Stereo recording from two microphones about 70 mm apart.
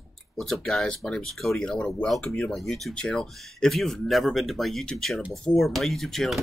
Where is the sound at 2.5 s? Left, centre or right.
Centre.